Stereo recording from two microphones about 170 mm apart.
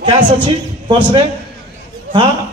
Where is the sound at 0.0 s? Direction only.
30° right (ahead or behind).